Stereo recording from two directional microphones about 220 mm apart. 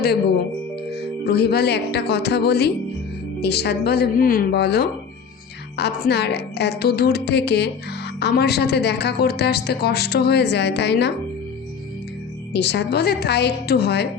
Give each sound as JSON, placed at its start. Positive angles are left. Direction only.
{"t": 0.9, "sound": "a woman's voice", "side_deg": 45}
{"t": 12.5, "sound": "a woman's voice", "side_deg": 50}